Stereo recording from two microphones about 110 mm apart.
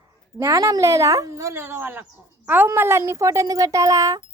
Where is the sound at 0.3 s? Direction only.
30° right (ahead or behind).